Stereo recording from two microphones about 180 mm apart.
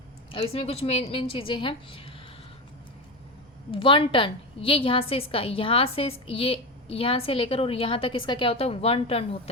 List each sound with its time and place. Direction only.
0.3 s a woman's voice: 30° left (ahead or behind)
3.7 s a woman's voice: 30° left (ahead or behind)